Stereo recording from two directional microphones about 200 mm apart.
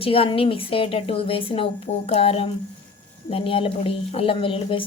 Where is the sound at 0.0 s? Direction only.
25° left (ahead or behind).